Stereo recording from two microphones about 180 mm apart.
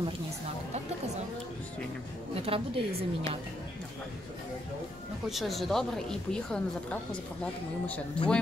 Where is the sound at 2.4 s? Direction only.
30° right (ahead or behind).